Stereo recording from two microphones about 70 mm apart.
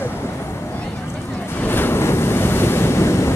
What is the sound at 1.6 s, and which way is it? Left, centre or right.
Waves, left.